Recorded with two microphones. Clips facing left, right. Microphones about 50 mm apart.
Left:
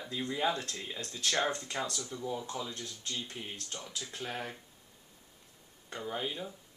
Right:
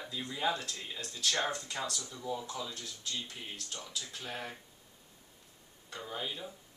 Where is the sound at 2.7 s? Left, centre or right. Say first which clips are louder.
Left 1 dB; left.